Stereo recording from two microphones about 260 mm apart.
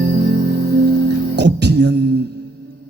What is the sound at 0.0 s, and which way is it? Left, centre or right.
Music, right.